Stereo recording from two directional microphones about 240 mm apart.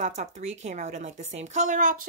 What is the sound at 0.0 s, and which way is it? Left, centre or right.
A woman's voice, right.